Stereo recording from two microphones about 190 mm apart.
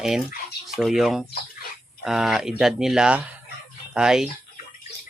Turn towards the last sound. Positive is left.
turn(degrees=-5)  # may be behind; listen again after turning